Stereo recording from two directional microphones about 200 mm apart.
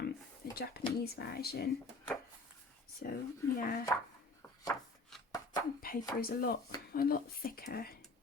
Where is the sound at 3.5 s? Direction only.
45° left (ahead or behind).